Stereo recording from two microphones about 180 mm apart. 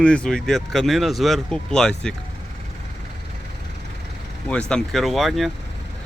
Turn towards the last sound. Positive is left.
turn(degrees=0)  # may be behind; listen again after turning